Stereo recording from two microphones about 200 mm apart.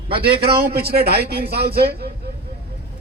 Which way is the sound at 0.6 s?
50° right (ahead or behind).